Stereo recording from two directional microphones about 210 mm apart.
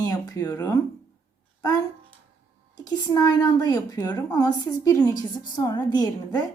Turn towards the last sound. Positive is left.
turn(degrees=20)  # may be behind; listen again after turning